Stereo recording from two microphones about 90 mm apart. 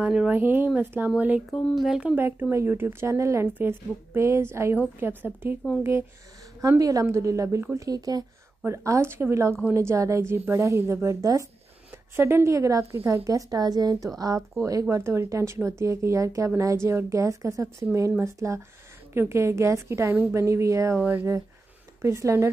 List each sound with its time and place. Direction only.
0.0 s speech: 10° right (ahead or behind)
0.3 s a woman's voice: 25° right (ahead or behind); by 2.1 s 5° right (ahead or behind)
2.1 s a woman's voice: 20° right (ahead or behind)
6.8 s a woman's voice: 40° right (ahead or behind)
7.9 s speech: 45° right (ahead or behind)
8.6 s a woman's voice: 35° right (ahead or behind)
12.2 s a woman's voice: 30° right (ahead or behind)
21.0 s a woman's voice: 20° right (ahead or behind)
22.0 s a woman's voice: 30° right (ahead or behind)